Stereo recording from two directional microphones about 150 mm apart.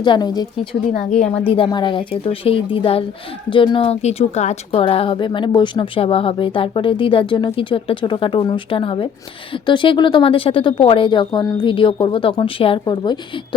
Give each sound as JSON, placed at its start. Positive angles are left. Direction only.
{"t": 0.0, "sound": "a woman's voice", "side_deg": 30}
{"t": 0.7, "sound": "a woman's voice", "side_deg": 45}
{"t": 11.3, "sound": "a woman's voice", "side_deg": 25}
{"t": 11.6, "sound": "a woman's voice", "side_deg": 35}